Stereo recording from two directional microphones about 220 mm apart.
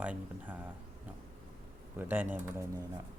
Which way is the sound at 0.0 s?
5° right (ahead or behind).